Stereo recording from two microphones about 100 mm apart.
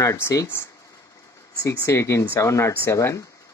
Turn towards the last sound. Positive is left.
turn(degrees=25)  # may be behind; listen again after turning